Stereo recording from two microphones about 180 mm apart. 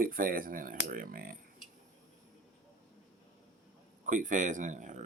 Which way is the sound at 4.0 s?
45° right (ahead or behind).